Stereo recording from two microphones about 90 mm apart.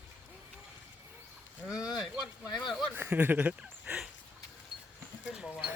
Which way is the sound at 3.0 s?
20° right (ahead or behind).